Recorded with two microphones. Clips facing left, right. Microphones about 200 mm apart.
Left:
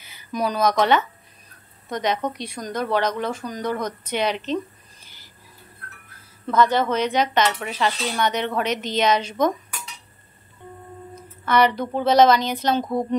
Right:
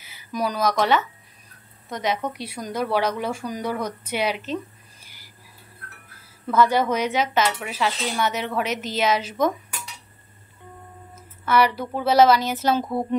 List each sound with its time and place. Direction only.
0.0 s speech: 5° right (ahead or behind)
5.0 s squawk: 10° right (ahead or behind)
6.4 s speech: 10° right (ahead or behind)
11.1 s speech: 5° right (ahead or behind)